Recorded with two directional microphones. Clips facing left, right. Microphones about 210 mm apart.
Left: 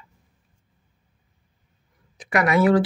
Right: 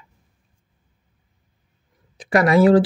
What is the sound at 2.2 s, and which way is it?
Speech, 30° right (ahead or behind).